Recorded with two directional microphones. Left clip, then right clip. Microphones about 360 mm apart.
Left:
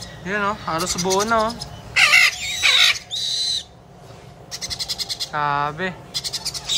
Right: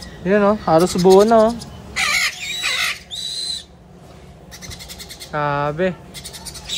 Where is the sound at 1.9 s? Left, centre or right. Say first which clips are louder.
Left 5 dB; left.